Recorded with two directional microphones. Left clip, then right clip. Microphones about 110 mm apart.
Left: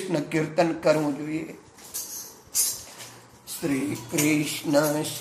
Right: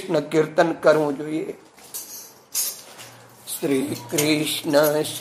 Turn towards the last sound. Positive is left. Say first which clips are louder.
# right 5 dB
turn(degrees=-25)  # may be behind; listen again after turning